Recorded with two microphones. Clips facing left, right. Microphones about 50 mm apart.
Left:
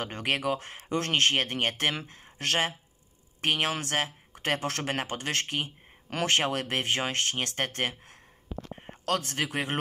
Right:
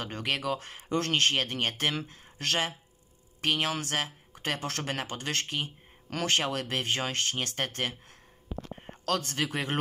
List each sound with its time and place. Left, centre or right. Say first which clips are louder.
0.0 s speech: left 2 dB; left
9.0 s speech: left 1 dB; left